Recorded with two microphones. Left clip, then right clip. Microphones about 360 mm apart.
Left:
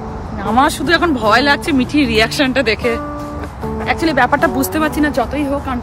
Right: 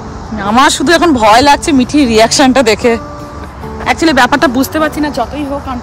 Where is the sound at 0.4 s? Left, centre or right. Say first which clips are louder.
Right 5 dB; right.